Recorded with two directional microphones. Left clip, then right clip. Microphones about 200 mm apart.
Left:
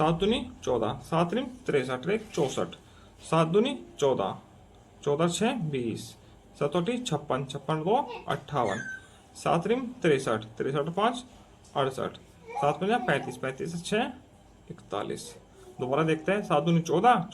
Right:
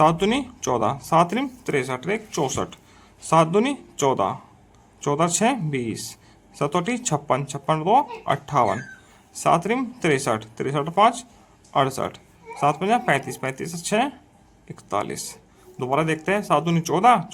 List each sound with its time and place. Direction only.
0.0 s speech: 50° right (ahead or behind)